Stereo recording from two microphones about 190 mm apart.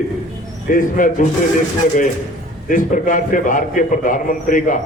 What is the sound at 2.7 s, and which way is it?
A man's voice, 45° left (ahead or behind).